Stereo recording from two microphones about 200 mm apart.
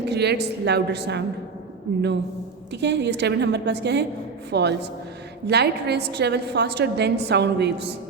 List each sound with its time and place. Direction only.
0.0 s a woman's voice: 55° right (ahead or behind)
2.8 s a woman's voice: 60° right (ahead or behind)